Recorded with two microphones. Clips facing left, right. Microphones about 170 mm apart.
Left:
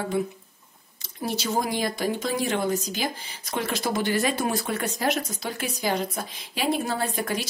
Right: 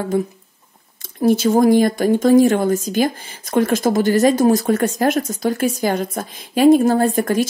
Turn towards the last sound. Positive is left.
turn(degrees=-50)  # may be behind; listen again after turning